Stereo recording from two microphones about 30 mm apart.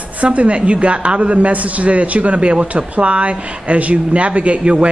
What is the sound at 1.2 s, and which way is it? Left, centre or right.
A man's voice, right.